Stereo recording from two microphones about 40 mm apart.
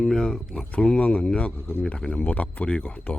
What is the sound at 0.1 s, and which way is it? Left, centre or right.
Speech, centre.